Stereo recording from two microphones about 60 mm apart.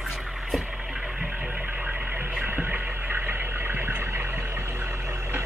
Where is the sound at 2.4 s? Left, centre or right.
Right.